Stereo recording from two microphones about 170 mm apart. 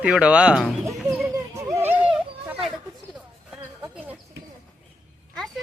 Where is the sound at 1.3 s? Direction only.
20° right (ahead or behind).